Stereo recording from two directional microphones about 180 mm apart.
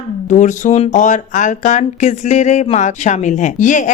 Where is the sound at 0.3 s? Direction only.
45° left (ahead or behind).